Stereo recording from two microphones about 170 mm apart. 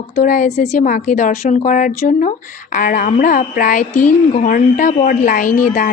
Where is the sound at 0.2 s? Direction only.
50° left (ahead or behind).